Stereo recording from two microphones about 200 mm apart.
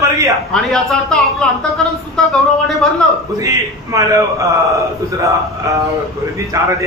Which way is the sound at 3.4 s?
15° right (ahead or behind).